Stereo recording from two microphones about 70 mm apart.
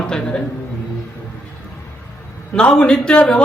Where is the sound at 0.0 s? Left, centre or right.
Centre.